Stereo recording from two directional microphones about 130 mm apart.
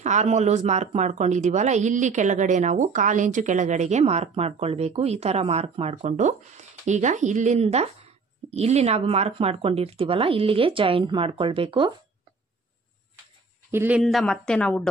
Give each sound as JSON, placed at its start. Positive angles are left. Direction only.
{"t": 0.0, "sound": "speech", "side_deg": -60}
{"t": 13.7, "sound": "speech", "side_deg": -15}
{"t": 14.0, "sound": "a woman's voice", "side_deg": 5}